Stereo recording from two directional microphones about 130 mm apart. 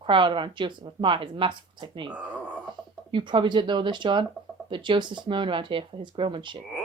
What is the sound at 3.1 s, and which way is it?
Speech, 40° right (ahead or behind).